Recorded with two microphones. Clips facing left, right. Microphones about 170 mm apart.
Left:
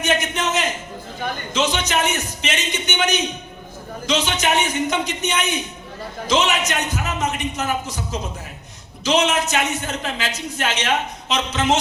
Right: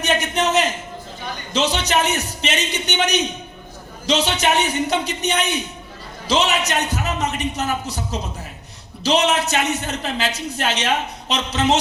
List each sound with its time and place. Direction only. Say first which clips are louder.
0.0 s a man's voice: right 2 dB; 35° right (ahead or behind)
9.0 s a man's voice: right 1 dB; 35° right (ahead or behind)